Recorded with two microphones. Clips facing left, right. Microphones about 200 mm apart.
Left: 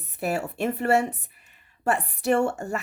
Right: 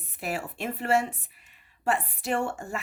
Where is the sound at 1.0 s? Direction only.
65° left (ahead or behind).